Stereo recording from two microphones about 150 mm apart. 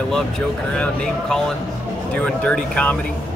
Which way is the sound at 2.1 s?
10° left (ahead or behind).